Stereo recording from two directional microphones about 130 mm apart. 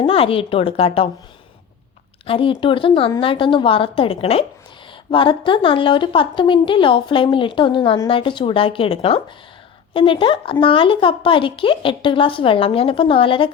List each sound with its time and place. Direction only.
0.0 s a woman's voice: 45° left (ahead or behind)
2.2 s a woman's voice: 45° left (ahead or behind)